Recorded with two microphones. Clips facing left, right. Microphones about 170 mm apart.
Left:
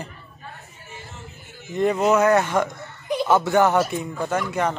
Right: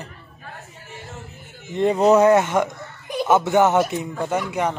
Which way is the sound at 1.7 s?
25° right (ahead or behind).